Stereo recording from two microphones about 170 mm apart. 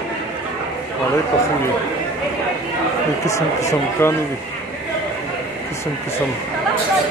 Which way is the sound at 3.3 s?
20° left (ahead or behind).